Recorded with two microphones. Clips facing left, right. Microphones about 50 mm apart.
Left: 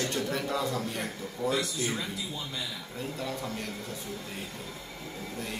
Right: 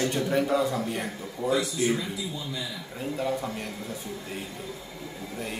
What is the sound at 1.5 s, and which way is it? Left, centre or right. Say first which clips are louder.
Speech: right 5 dB; right.